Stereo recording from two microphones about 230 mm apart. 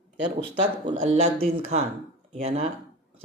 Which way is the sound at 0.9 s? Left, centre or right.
Right.